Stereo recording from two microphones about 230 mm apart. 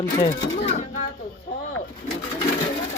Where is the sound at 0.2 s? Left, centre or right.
Left.